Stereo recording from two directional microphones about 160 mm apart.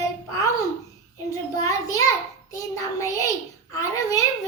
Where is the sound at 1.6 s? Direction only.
20° left (ahead or behind).